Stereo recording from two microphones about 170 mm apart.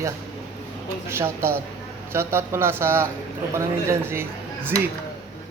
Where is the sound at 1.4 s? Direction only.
15° right (ahead or behind).